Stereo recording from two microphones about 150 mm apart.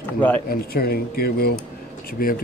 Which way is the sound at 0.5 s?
85° left.